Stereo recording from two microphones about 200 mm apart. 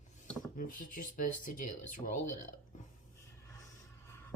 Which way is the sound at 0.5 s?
45° left (ahead or behind).